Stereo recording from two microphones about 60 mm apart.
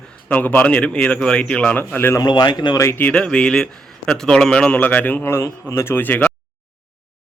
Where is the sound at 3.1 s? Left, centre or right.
Centre.